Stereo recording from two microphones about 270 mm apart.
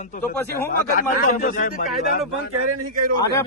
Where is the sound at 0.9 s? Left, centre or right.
Left.